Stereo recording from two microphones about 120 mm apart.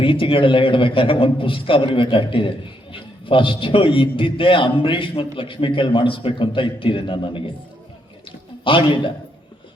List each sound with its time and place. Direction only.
0.0 s a man's voice: 45° left (ahead or behind)
8.6 s a man's voice: 45° left (ahead or behind)